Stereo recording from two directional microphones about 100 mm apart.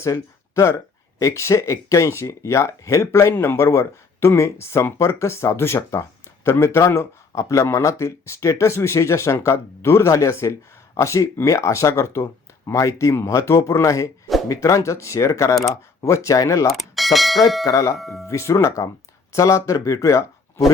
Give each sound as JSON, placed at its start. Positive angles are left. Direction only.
{"t": 0.0, "sound": "speech", "side_deg": 30}
{"t": 16.6, "sound": "speech", "side_deg": 0}
{"t": 17.7, "sound": "speech", "side_deg": 35}
{"t": 17.9, "sound": "speech", "side_deg": 0}
{"t": 18.3, "sound": "speech", "side_deg": 30}